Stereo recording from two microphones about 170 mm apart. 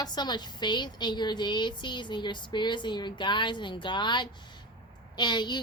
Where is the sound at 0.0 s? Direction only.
25° left (ahead or behind).